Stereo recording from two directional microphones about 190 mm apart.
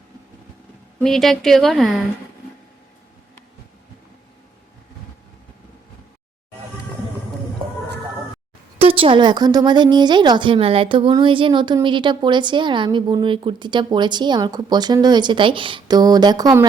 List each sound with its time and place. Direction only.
0.9 s speech: centre (ahead or behind)
8.8 s a woman's voice: 30° right (ahead or behind)